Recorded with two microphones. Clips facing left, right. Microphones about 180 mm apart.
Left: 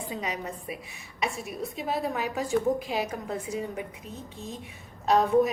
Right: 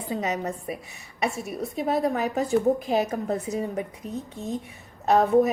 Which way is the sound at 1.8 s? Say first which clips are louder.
Right 6 dB; 40° right (ahead or behind).